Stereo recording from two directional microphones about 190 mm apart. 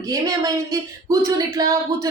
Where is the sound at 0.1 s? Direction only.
20° right (ahead or behind).